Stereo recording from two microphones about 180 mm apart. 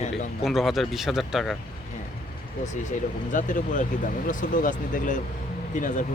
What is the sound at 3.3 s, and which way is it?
Speech, 45° left (ahead or behind).